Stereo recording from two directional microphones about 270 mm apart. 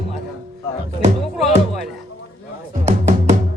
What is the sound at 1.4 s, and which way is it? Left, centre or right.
Speech, centre.